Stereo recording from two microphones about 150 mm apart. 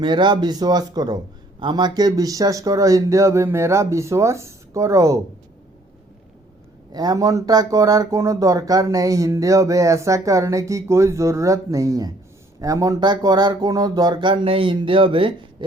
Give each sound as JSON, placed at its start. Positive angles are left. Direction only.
{"t": 0.0, "sound": "a man's voice", "side_deg": -30}
{"t": 6.9, "sound": "a man's voice", "side_deg": -25}